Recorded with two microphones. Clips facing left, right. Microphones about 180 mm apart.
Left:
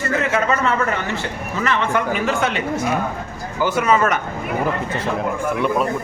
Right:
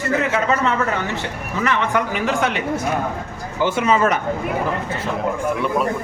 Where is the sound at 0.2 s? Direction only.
15° right (ahead or behind).